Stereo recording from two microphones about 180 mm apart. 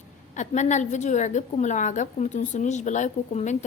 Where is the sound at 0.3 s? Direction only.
40° left (ahead or behind).